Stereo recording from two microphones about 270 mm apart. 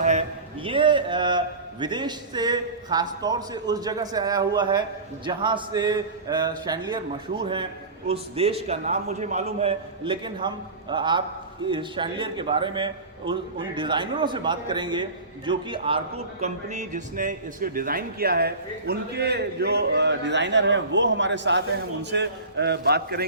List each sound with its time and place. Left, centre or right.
0.0 s a man's voice: right